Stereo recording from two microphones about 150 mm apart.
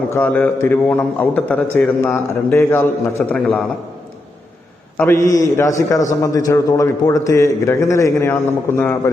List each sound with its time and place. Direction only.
0.1 s a man's voice: 10° left (ahead or behind)
4.9 s a man's voice: 15° left (ahead or behind)